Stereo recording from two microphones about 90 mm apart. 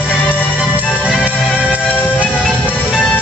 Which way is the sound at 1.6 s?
15° right (ahead or behind).